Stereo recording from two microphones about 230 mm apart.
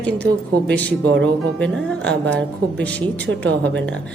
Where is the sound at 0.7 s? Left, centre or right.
Centre.